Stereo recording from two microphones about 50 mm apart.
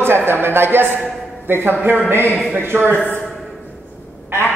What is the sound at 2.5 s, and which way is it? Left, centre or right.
Speech, right.